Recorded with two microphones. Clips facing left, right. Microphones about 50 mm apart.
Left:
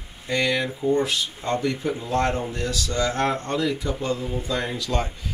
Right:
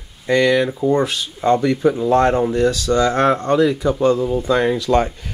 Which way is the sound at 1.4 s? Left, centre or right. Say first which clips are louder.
Right 10 dB; right.